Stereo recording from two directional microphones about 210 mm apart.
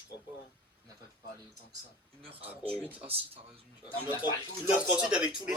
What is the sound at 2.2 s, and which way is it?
Speech, 25° right (ahead or behind).